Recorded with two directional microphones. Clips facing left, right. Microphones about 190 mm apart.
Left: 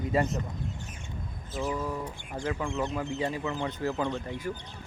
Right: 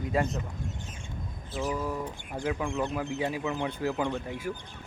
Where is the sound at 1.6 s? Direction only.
10° right (ahead or behind).